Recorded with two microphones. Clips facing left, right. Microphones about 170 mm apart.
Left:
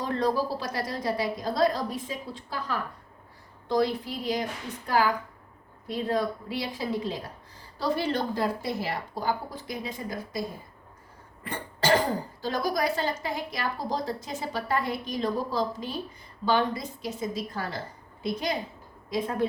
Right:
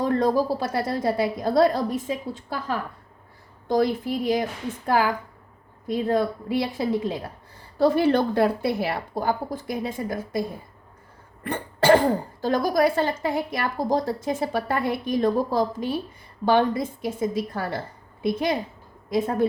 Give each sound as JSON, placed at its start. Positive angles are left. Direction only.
{"t": 0.0, "sound": "speech", "side_deg": -50}
{"t": 11.4, "sound": "a woman's voice", "side_deg": -55}
{"t": 19.1, "sound": "speech", "side_deg": -45}